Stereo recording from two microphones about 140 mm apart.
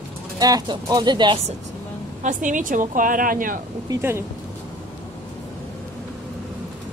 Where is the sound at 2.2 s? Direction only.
65° right (ahead or behind).